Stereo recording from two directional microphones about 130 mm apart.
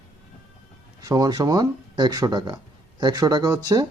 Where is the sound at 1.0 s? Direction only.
30° right (ahead or behind).